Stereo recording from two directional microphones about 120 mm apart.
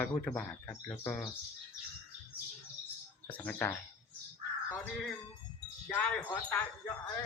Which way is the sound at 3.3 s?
15° left (ahead or behind).